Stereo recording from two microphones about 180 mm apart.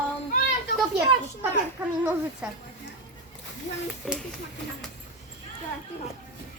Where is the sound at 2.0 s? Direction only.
10° right (ahead or behind).